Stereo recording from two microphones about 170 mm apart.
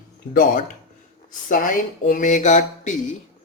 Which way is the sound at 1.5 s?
55° left (ahead or behind).